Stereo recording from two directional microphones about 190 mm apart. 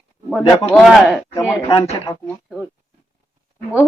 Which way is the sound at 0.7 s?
Centre (ahead or behind).